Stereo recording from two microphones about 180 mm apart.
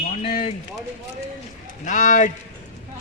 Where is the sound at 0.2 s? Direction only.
35° left (ahead or behind).